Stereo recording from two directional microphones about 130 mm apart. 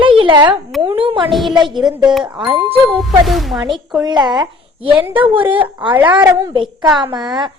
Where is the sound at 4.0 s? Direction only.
35° right (ahead or behind).